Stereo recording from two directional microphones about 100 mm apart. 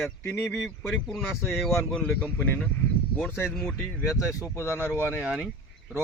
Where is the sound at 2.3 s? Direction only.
20° left (ahead or behind).